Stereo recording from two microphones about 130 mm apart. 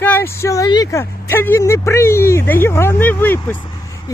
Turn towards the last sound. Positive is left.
turn(degrees=15)  # may be behind; listen again after turning